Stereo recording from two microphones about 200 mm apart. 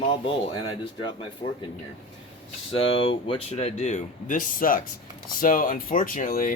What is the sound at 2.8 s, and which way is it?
Speech, 25° left (ahead or behind).